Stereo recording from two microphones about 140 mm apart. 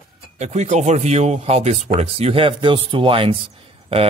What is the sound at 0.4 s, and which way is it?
A man's voice, 55° right (ahead or behind).